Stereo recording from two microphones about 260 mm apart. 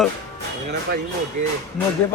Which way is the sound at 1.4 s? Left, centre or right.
Right.